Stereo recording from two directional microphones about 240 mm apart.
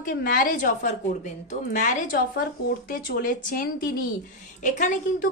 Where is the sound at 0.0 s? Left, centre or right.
Left.